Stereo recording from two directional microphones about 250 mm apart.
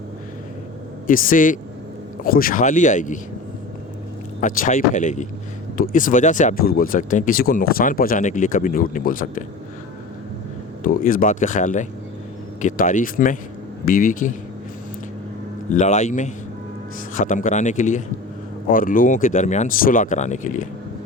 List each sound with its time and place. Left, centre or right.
1.0 s speech: left
4.4 s speech: left
10.8 s speech: left
15.7 s speech: left